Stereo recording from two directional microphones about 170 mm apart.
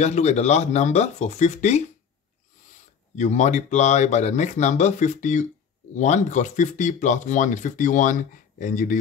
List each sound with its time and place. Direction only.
0.0 s speech: 40° left (ahead or behind)
3.2 s speech: 45° left (ahead or behind)